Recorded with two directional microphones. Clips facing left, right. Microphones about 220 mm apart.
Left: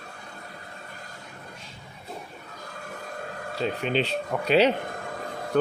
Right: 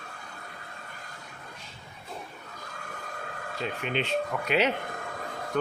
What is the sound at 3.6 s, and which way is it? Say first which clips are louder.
Speech: left 5 dB; 35° left (ahead or behind).